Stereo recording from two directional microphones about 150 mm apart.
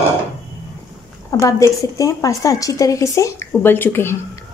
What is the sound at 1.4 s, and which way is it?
A woman's voice, 20° left (ahead or behind).